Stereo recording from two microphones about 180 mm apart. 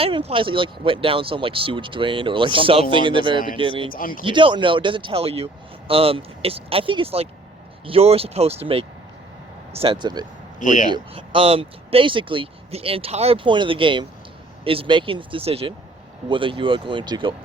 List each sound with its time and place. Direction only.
0.0 s speech: 30° right (ahead or behind)
3.9 s speech: 50° left (ahead or behind)
4.2 s speech: 30° right (ahead or behind)
10.6 s speech: 45° left (ahead or behind)
10.8 s speech: 25° right (ahead or behind)